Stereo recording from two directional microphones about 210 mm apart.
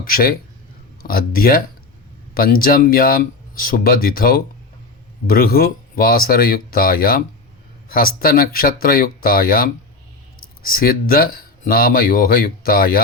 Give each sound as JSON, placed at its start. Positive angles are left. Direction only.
{"t": 0.1, "sound": "speech", "side_deg": 45}